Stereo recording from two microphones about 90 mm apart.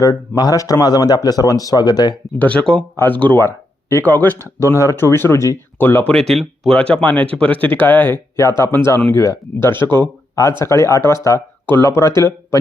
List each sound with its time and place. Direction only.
0.0 s speech: 40° left (ahead or behind)
2.4 s speech: 15° left (ahead or behind)
4.7 s speech: 30° left (ahead or behind)
6.1 s speech: 5° left (ahead or behind)
8.4 s speech: 30° left (ahead or behind)